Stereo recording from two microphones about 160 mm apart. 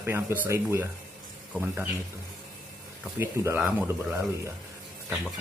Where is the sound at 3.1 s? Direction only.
15° right (ahead or behind).